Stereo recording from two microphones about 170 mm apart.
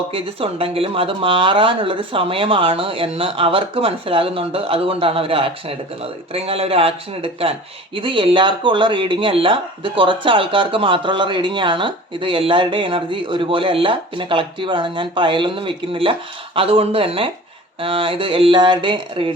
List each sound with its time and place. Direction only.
0.1 s speech: 35° right (ahead or behind)